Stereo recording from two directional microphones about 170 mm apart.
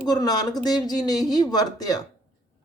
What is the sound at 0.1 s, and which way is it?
A woman's voice, 20° left (ahead or behind).